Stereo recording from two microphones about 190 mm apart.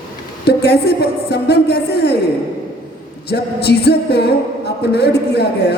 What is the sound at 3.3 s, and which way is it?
Music, 60° left (ahead or behind).